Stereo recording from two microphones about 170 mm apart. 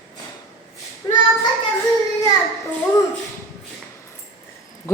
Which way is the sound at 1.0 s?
25° left (ahead or behind).